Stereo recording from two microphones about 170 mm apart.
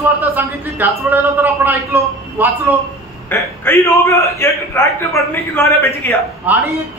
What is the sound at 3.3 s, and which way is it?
A man's voice, 15° left (ahead or behind).